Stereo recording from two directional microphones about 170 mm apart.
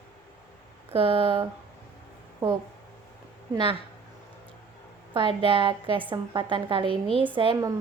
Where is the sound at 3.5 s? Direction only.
30° right (ahead or behind).